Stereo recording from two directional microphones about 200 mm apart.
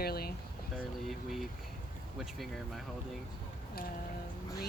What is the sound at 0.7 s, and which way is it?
Speech, centre (ahead or behind).